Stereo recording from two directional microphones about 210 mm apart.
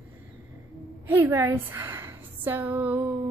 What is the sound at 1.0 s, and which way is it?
A woman's voice, 10° right (ahead or behind).